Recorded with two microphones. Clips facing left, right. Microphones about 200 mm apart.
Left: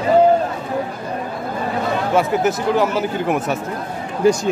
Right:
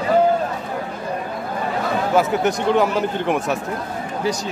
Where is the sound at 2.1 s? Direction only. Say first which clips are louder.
Left 1 dB; centre (ahead or behind).